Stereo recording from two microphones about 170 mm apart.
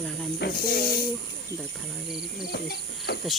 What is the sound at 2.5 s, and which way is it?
Speech, 70° left (ahead or behind).